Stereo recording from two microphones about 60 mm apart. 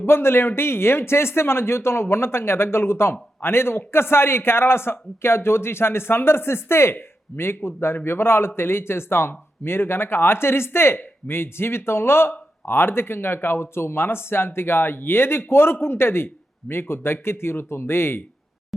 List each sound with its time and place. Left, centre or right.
0.0 s speech: left